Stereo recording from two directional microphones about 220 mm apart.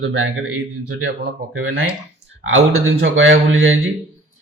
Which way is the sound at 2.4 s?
60° right (ahead or behind).